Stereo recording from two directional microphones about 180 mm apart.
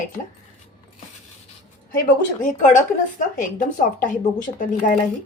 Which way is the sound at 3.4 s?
45° left (ahead or behind).